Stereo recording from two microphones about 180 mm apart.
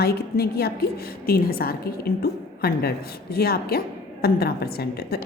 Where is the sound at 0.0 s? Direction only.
60° left (ahead or behind).